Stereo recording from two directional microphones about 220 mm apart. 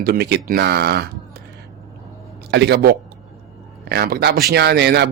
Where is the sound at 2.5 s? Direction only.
50° right (ahead or behind).